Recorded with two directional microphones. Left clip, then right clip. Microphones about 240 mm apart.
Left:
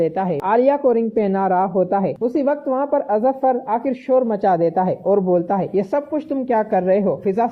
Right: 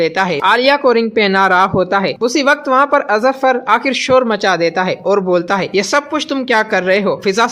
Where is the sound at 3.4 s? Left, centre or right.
Centre.